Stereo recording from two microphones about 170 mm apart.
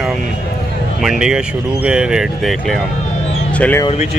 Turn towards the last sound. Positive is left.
turn(degrees=10)  # may be behind; listen again after turning